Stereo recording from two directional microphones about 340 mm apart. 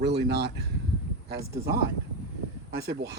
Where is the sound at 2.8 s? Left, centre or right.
Right.